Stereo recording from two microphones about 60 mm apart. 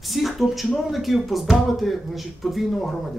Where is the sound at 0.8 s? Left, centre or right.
Centre.